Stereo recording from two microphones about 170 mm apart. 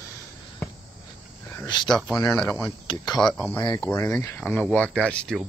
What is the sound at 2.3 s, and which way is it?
Speech, centre (ahead or behind).